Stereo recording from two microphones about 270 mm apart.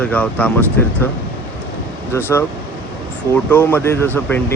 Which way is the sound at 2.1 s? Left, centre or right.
Centre.